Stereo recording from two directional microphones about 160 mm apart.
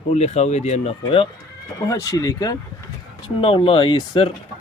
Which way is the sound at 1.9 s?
20° left (ahead or behind).